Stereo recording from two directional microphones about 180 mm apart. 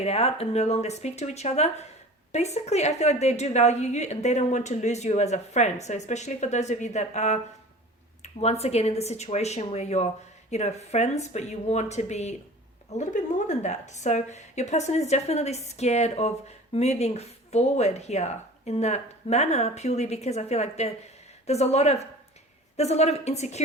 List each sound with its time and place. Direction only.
0.0 s a woman's voice: 35° left (ahead or behind)